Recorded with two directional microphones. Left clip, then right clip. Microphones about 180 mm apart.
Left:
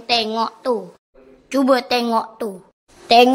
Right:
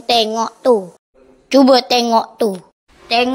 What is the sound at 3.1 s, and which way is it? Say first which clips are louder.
Speech: left 4 dB; 25° left (ahead or behind).